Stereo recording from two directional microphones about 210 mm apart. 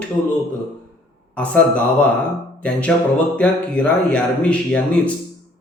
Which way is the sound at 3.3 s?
5° left (ahead or behind).